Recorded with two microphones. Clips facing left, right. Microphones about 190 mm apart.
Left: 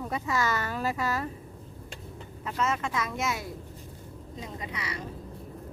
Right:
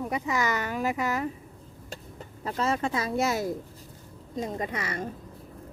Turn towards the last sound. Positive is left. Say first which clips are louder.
# right 5 dB
turn(degrees=-50)  # may be behind; listen again after turning